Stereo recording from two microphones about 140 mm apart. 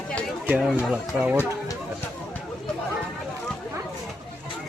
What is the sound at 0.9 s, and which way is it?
Speech, 10° right (ahead or behind).